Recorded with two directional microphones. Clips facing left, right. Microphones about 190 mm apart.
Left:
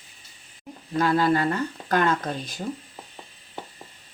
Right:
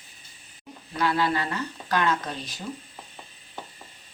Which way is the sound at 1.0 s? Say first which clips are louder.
Left 4 dB; 45° left (ahead or behind).